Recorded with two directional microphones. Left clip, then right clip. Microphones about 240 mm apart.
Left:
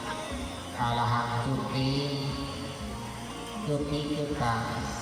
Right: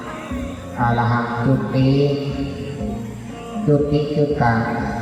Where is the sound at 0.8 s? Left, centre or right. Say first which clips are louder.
Right 9 dB; right.